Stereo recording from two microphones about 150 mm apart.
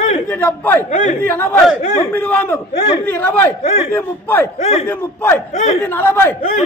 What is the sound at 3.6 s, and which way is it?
Speech, 50° left (ahead or behind).